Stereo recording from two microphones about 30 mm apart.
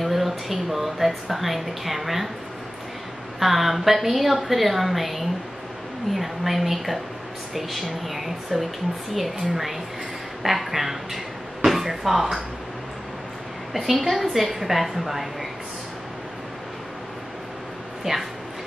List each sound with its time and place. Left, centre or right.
0.0 s a woman's voice: centre
3.3 s a woman's voice: centre
13.7 s a woman's voice: centre
18.1 s a woman's voice: centre